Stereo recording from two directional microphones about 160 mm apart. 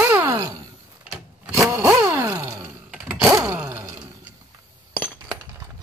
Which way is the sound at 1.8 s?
15° right (ahead or behind).